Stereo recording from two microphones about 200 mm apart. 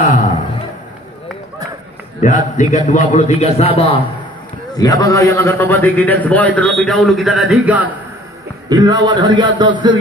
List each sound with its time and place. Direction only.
0.0 s a sound: 40° left (ahead or behind)
2.1 s a man's voice: 40° left (ahead or behind)
4.7 s a man's voice: 20° left (ahead or behind); by 7.9 s 5° right (ahead or behind)
8.6 s a man's voice: 20° right (ahead or behind)